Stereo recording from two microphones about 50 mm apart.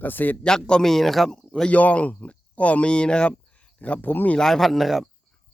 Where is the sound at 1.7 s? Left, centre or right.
Left.